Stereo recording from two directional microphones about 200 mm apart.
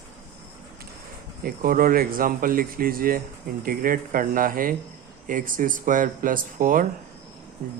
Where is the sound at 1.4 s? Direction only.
45° right (ahead or behind).